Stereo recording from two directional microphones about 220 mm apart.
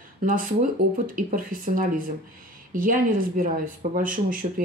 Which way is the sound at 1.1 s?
40° right (ahead or behind).